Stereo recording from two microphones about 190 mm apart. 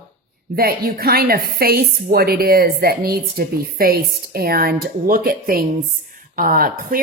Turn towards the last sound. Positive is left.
turn(degrees=-45)  # may be behind; listen again after turning